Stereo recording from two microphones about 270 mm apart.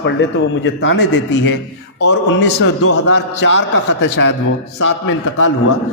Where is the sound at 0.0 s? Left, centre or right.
Left.